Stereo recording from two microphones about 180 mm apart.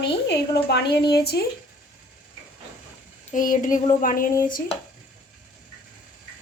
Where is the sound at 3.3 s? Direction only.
45° left (ahead or behind).